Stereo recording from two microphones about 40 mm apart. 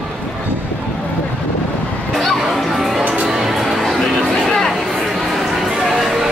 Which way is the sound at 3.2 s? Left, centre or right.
Centre.